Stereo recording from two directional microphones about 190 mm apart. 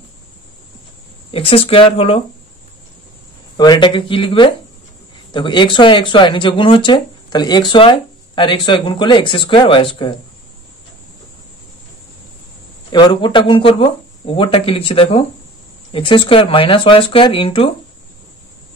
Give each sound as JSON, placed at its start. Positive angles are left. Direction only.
{"t": 1.3, "sound": "speech", "side_deg": 30}
{"t": 3.5, "sound": "speech", "side_deg": 20}
{"t": 12.9, "sound": "speech", "side_deg": 25}